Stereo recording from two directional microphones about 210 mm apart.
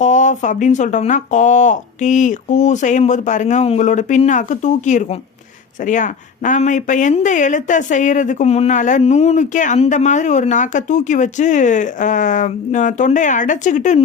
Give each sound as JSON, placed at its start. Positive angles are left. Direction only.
{"t": 0.0, "sound": "speech", "side_deg": 35}